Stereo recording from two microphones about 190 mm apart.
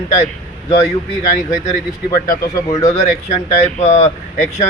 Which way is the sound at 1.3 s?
40° left (ahead or behind).